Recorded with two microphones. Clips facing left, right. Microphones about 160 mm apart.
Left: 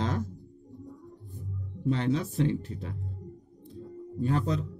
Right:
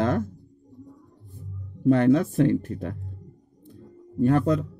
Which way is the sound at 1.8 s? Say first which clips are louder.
Right 9 dB; 55° right (ahead or behind).